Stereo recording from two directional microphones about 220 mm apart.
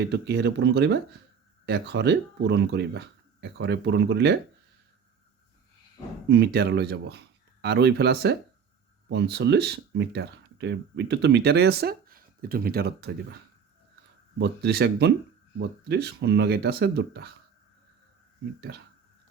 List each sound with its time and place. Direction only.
0.0 s speech: 50° right (ahead or behind)
6.2 s speech: 50° right (ahead or behind)
14.3 s speech: 50° right (ahead or behind)
18.7 s speech: 50° right (ahead or behind)